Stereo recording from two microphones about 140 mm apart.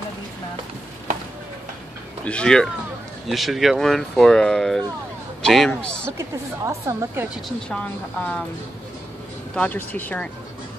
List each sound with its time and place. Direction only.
2.2 s speech: 5° left (ahead or behind)
6.1 s a woman's voice: 20° right (ahead or behind)
7.4 s speech: 10° left (ahead or behind)
9.6 s speech: 10° left (ahead or behind)